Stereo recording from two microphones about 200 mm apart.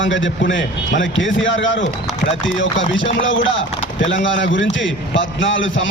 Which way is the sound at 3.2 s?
70° left (ahead or behind).